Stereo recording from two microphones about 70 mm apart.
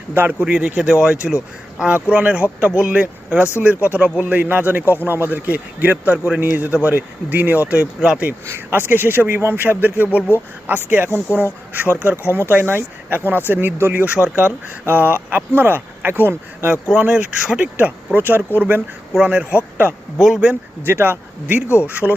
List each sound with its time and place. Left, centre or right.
0.1 s speech: right
8.4 s speech: right
16.9 s speech: centre
17.7 s speech: right
19.1 s speech: centre
20.1 s speech: centre
20.8 s speech: right